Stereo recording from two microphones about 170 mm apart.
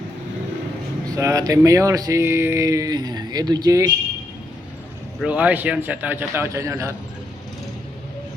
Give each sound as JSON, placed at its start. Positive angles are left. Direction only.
{"t": 1.1, "sound": "speech", "side_deg": -20}
{"t": 5.2, "sound": "a man's voice", "side_deg": -10}